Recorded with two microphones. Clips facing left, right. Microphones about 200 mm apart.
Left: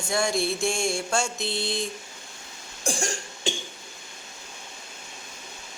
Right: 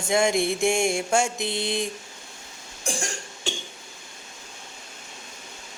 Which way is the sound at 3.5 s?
15° left (ahead or behind).